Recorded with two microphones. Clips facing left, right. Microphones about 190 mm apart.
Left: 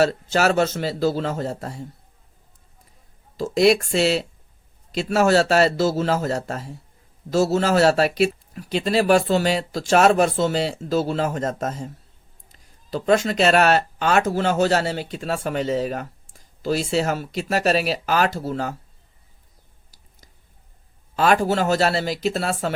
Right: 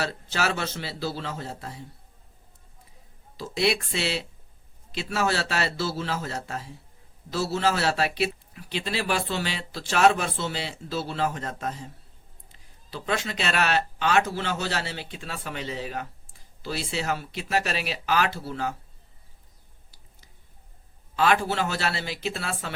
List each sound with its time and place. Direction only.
0.0 s speech: 45° left (ahead or behind)
3.3 s speech: 45° left (ahead or behind)
21.2 s speech: 45° left (ahead or behind)